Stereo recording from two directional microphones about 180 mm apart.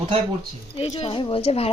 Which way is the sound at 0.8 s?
35° left (ahead or behind).